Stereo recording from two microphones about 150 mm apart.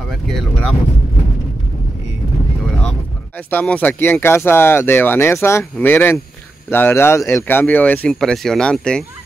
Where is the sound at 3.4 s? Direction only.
10° left (ahead or behind).